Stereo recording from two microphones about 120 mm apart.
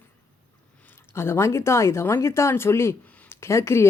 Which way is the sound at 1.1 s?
20° left (ahead or behind).